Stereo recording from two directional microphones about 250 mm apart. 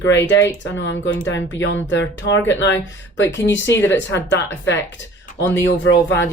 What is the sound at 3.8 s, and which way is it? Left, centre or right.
Speech, centre.